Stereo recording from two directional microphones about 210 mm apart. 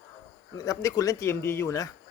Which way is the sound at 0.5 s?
15° left (ahead or behind).